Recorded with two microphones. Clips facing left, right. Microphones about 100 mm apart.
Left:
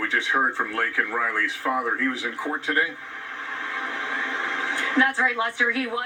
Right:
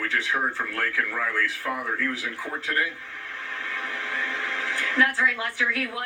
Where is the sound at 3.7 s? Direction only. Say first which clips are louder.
Left 2 dB; 20° left (ahead or behind).